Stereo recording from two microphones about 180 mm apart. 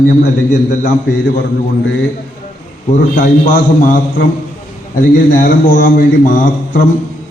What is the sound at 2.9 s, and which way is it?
A man's voice, 45° left (ahead or behind).